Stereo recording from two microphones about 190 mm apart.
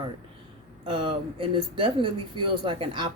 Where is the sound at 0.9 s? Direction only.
25° right (ahead or behind).